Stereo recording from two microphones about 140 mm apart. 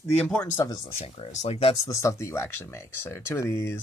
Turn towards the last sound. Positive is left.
turn(degrees=20)  # may be behind; listen again after turning